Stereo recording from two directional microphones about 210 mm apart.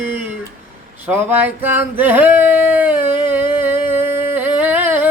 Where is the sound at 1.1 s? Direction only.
10° right (ahead or behind).